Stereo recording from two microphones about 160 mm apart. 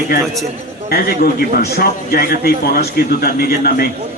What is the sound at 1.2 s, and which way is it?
A man's voice, 75° left (ahead or behind).